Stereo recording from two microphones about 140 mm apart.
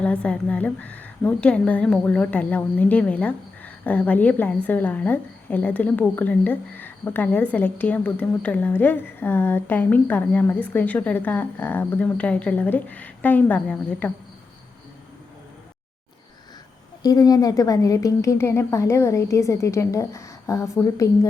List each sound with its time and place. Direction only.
0.0 s a woman's voice: 10° left (ahead or behind)
17.0 s a woman's voice: 25° left (ahead or behind)